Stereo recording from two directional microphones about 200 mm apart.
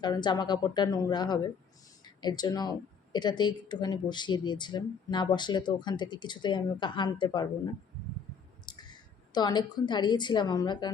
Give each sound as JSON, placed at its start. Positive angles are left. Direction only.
{"t": 0.0, "sound": "speech", "side_deg": 20}
{"t": 8.6, "sound": "speech", "side_deg": 20}